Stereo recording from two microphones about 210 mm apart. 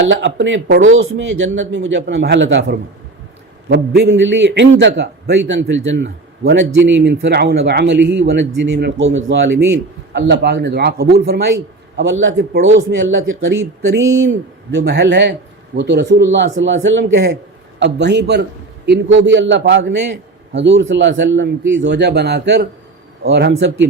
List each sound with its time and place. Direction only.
0.1 s a man's voice: 60° right (ahead or behind)
14.8 s a man's voice: 55° right (ahead or behind)